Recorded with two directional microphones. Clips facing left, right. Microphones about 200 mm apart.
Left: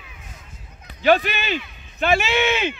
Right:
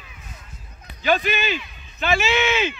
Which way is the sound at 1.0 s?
60° left (ahead or behind).